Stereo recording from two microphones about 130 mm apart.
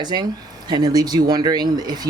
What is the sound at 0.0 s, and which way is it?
Speech, 35° right (ahead or behind).